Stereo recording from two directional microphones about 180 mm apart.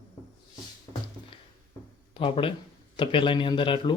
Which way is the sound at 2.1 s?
30° left (ahead or behind).